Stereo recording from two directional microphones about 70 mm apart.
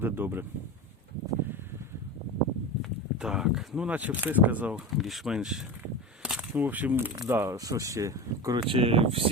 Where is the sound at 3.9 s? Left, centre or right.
Right.